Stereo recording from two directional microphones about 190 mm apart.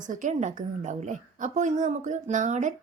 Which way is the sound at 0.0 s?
40° right (ahead or behind).